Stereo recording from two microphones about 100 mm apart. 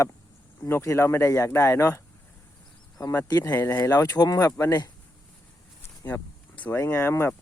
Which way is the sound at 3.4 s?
20° left (ahead or behind).